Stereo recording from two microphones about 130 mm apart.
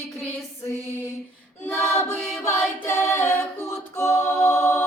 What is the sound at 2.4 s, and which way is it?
Music, 20° left (ahead or behind).